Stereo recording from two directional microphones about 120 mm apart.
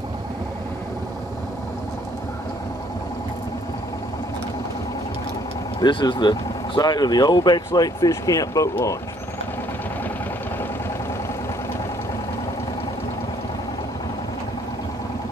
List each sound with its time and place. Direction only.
5.8 s speech: 40° left (ahead or behind)